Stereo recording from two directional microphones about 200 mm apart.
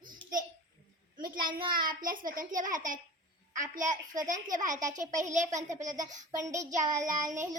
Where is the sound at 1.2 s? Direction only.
45° right (ahead or behind).